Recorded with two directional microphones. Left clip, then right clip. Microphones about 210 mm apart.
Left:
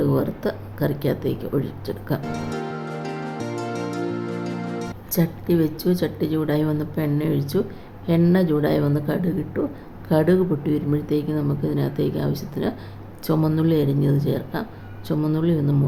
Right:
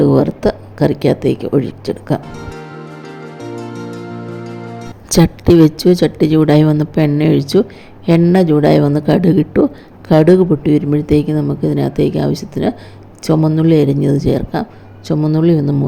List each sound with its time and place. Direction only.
0.0 s speech: 30° right (ahead or behind)
3.0 s music: centre (ahead or behind)
5.0 s a woman's voice: 35° right (ahead or behind)